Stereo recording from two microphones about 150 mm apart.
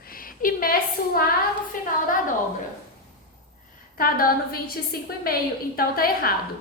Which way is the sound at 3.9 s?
80° left.